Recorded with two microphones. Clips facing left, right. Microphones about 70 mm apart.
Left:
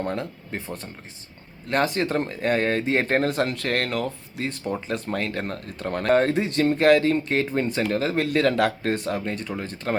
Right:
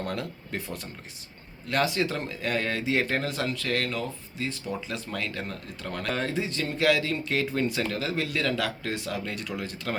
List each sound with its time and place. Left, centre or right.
0.0 s speech: left
7.9 s speech: left